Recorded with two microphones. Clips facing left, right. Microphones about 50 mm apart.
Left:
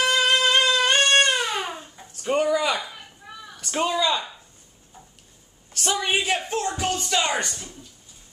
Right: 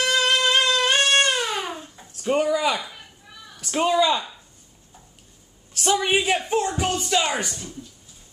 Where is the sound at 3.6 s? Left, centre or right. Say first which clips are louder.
Right 3 dB; centre.